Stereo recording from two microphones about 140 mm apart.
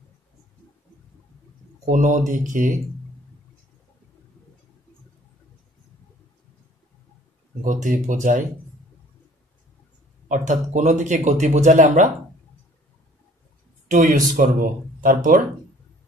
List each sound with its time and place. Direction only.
1.9 s speech: 65° right (ahead or behind)
7.6 s speech: 65° right (ahead or behind)
10.2 s speech: 60° right (ahead or behind)
13.8 s speech: 70° right (ahead or behind); by 15.4 s 90° right